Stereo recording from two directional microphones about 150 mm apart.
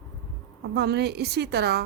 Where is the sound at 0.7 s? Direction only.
90° right.